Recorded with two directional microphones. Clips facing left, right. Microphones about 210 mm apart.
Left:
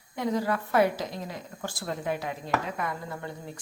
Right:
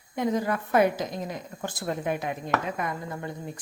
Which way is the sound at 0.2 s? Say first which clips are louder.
Right 2 dB; 20° right (ahead or behind).